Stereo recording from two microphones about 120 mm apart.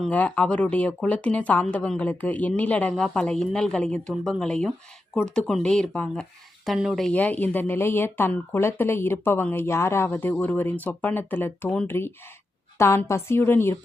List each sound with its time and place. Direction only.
0.1 s a woman's voice: 10° left (ahead or behind)
7.1 s speech: 15° left (ahead or behind)